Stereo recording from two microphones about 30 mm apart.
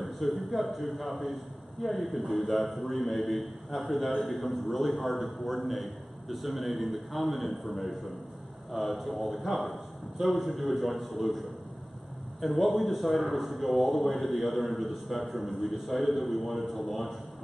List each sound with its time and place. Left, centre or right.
0.0 s a man's voice: centre